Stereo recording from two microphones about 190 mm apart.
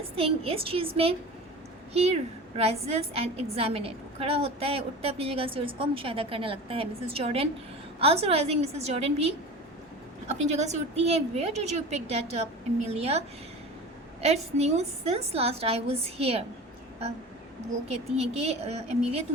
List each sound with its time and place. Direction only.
0.2 s a woman's voice: 30° right (ahead or behind)
18.2 s a woman's voice: 35° right (ahead or behind)